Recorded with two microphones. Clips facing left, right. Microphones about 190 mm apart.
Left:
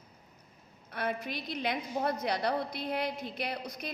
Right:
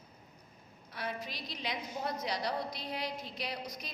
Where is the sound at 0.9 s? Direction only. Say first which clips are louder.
Left 6 dB; 55° left (ahead or behind).